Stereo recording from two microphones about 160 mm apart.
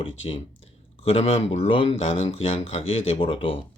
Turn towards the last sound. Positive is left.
turn(degrees=35)  # may be behind; listen again after turning